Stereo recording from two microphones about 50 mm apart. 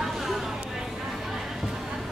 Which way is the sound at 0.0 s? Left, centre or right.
Centre.